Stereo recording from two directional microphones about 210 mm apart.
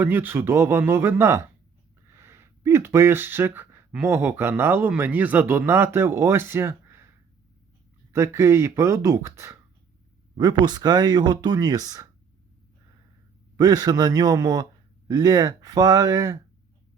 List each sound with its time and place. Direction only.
0.0 s a man's voice: 10° right (ahead or behind)
8.1 s a man's voice: 15° right (ahead or behind)
13.6 s a man's voice: 20° right (ahead or behind)